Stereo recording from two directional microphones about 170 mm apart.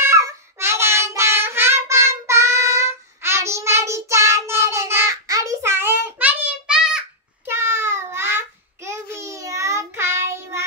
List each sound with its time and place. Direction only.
0.1 s child singing: 15° right (ahead or behind)